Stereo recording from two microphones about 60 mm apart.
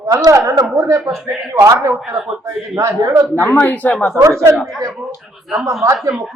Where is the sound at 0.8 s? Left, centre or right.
Right.